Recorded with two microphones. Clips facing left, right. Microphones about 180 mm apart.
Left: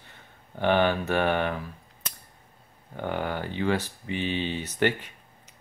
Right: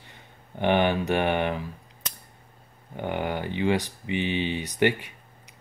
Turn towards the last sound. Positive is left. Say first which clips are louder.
# right 2 dB
turn(degrees=-15)  # may be behind; listen again after turning